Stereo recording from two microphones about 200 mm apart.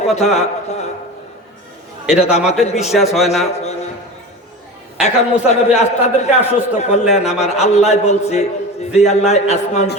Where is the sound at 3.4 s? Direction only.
35° left (ahead or behind).